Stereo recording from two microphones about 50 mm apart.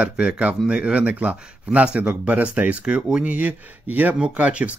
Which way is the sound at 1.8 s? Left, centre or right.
Right.